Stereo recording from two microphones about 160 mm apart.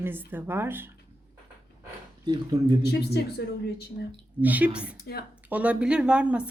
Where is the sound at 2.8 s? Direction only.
90° left.